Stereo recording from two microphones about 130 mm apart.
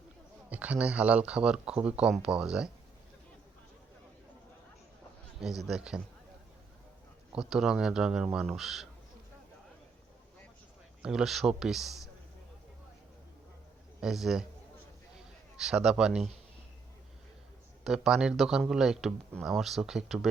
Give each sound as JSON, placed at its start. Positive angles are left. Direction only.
{"t": 0.5, "sound": "speech", "side_deg": -10}
{"t": 5.4, "sound": "speech", "side_deg": -5}
{"t": 7.3, "sound": "speech", "side_deg": -5}
{"t": 11.0, "sound": "speech", "side_deg": -5}
{"t": 14.0, "sound": "speech", "side_deg": -5}
{"t": 15.5, "sound": "speech", "side_deg": -5}
{"t": 17.8, "sound": "speech", "side_deg": -5}